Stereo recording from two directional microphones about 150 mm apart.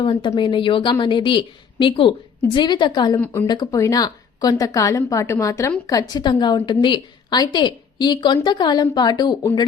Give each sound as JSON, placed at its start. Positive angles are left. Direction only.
{"t": 0.0, "sound": "a woman's voice", "side_deg": 35}